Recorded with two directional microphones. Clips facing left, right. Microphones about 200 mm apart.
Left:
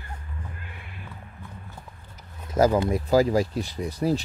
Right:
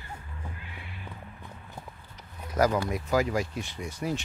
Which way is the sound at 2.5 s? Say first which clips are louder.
Left 5 dB; 25° left (ahead or behind).